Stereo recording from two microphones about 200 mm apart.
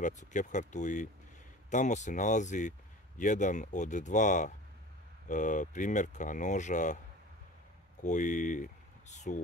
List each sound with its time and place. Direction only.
0.0 s speech: 40° left (ahead or behind)
8.0 s speech: 40° left (ahead or behind)